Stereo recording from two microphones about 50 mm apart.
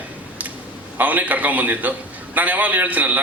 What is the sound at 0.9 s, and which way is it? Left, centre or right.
A man's voice, right.